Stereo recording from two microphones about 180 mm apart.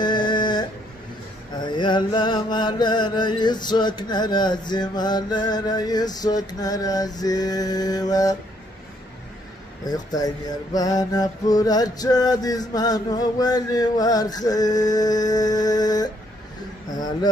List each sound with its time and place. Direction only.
0.0 s a sound: 25° left (ahead or behind)
1.5 s mantra: 25° left (ahead or behind)
9.8 s mantra: 20° left (ahead or behind)